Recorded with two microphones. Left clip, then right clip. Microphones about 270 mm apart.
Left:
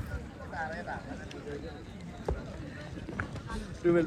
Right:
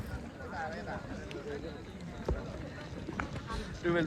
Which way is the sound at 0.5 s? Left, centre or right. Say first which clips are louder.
Left 3 dB; left.